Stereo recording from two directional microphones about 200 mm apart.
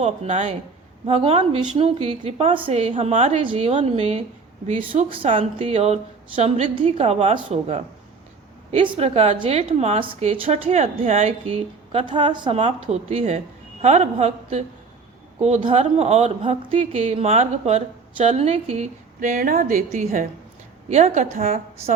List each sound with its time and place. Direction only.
0.0 s speech: 35° right (ahead or behind)